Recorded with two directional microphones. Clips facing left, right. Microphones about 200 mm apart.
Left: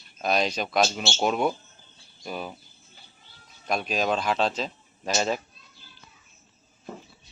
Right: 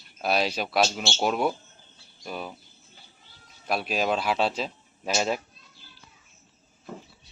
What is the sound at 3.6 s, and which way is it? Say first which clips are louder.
Speech: even; 5° right (ahead or behind).